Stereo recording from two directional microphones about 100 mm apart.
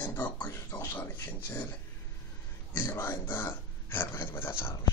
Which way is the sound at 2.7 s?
25° left (ahead or behind).